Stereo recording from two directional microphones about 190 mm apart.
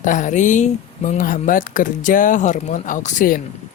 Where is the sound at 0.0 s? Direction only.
40° left (ahead or behind).